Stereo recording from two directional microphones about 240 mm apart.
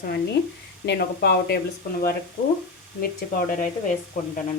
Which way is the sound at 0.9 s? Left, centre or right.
Left.